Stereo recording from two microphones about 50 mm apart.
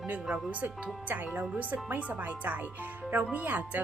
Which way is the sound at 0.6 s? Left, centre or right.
Right.